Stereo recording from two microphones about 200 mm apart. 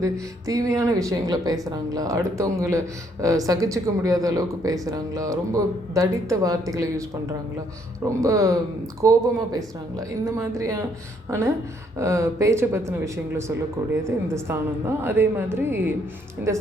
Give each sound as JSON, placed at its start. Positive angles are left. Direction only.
{"t": 0.0, "sound": "speech", "side_deg": -15}
{"t": 8.0, "sound": "speech", "side_deg": -15}
{"t": 13.9, "sound": "speech", "side_deg": -15}